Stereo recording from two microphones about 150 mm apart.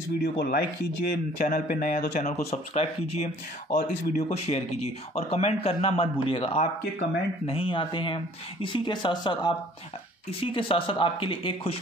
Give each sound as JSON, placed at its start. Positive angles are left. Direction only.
{"t": 0.2, "sound": "speech", "side_deg": 85}
{"t": 1.1, "sound": "speech", "side_deg": 65}
{"t": 2.5, "sound": "speech", "side_deg": 45}